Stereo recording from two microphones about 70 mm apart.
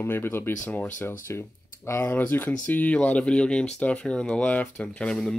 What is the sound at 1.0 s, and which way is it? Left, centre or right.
Speech, left.